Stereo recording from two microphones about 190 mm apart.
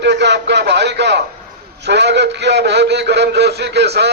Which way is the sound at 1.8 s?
65° right (ahead or behind).